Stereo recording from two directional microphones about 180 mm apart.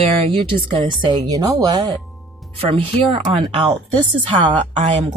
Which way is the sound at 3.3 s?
30° right (ahead or behind).